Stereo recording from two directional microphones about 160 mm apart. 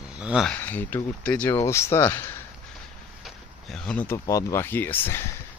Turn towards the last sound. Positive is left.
turn(degrees=15)  # may be behind; listen again after turning